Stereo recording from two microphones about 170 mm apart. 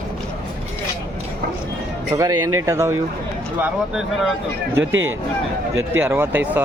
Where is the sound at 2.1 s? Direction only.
20° right (ahead or behind).